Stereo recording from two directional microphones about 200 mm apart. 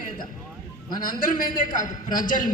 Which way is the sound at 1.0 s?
45° left (ahead or behind).